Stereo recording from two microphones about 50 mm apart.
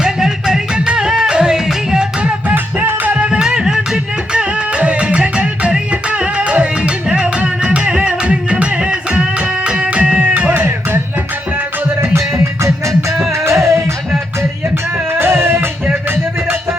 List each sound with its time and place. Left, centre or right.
0.0 s music: centre
2.8 s music: right
3.2 s music: centre
10.5 s music: right
12.1 s music: right
15.2 s music: right